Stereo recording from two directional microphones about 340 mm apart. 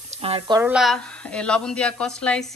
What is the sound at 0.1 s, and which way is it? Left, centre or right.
Speech, centre.